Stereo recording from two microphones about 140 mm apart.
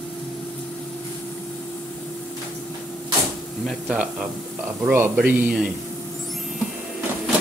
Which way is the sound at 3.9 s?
10° right (ahead or behind).